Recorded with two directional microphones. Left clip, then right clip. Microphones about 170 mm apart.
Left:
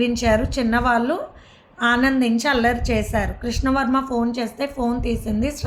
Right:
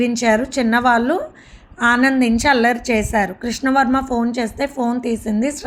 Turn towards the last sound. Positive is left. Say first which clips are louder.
# right 4 dB
turn(degrees=-30)  # may be behind; listen again after turning